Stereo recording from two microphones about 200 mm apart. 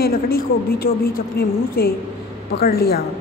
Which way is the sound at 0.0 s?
50° left (ahead or behind).